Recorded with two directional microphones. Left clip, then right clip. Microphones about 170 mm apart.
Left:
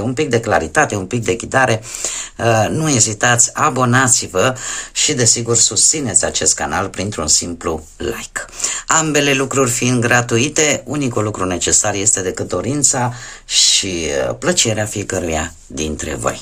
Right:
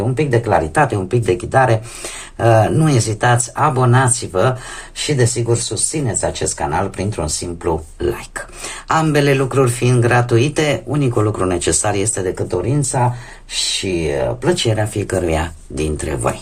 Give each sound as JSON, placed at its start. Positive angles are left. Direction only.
{"t": 0.1, "sound": "speech", "side_deg": 40}
{"t": 8.0, "sound": "speech", "side_deg": 25}
{"t": 12.2, "sound": "speech", "side_deg": 40}